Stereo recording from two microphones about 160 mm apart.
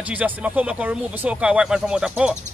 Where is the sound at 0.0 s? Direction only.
10° right (ahead or behind).